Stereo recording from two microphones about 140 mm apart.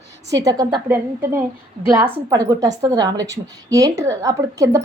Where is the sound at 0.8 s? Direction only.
15° right (ahead or behind).